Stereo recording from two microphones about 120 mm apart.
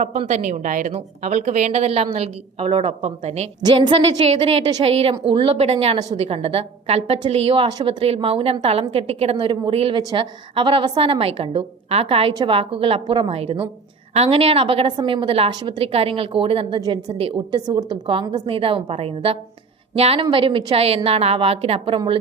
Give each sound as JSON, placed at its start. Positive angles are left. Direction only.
{"t": 0.0, "sound": "a woman's voice", "side_deg": -75}
{"t": 3.6, "sound": "a woman's voice", "side_deg": -35}
{"t": 4.3, "sound": "a woman's voice", "side_deg": -60}
{"t": 9.4, "sound": "a woman's voice", "side_deg": -40}
{"t": 9.7, "sound": "a woman's voice", "side_deg": -55}
{"t": 17.2, "sound": "a woman's voice", "side_deg": -55}
{"t": 17.5, "sound": "a woman's voice", "side_deg": -35}
{"t": 20.3, "sound": "a woman's voice", "side_deg": -45}
{"t": 20.7, "sound": "a woman's voice", "side_deg": -55}